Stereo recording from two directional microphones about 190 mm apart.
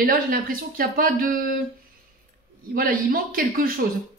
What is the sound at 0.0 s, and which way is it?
Speech, 50° right (ahead or behind).